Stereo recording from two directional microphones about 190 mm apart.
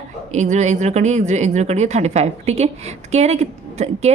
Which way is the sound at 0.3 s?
40° right (ahead or behind).